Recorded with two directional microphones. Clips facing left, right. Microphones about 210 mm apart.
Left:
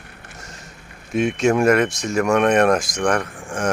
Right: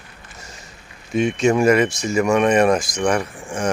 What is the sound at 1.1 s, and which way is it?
Speech, centre (ahead or behind).